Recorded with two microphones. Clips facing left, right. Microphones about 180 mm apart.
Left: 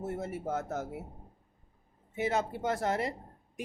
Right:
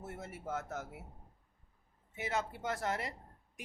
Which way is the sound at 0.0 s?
30° left (ahead or behind).